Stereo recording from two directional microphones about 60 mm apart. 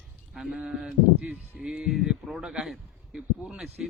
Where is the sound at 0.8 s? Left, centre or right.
Right.